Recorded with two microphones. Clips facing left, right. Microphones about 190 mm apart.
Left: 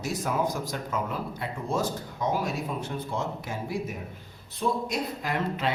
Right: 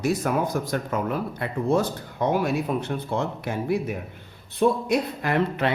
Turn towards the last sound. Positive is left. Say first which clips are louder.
# right 5 dB
turn(degrees=-60)  # may be behind; listen again after turning